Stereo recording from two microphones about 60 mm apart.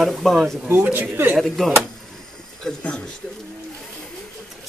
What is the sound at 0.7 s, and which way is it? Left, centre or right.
Speech, right.